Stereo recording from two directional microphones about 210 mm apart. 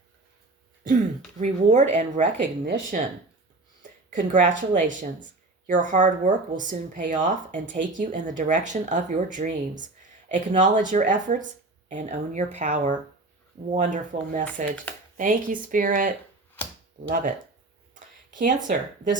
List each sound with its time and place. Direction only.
1.4 s speech: 35° right (ahead or behind)
4.1 s speech: 40° right (ahead or behind)
14.4 s speech: 5° left (ahead or behind)
15.2 s speech: 40° right (ahead or behind)
18.3 s speech: 40° right (ahead or behind)